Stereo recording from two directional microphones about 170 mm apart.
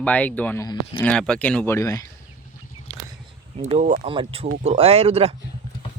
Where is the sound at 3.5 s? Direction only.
35° right (ahead or behind).